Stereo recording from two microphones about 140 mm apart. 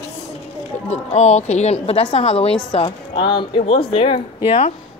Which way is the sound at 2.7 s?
35° left (ahead or behind).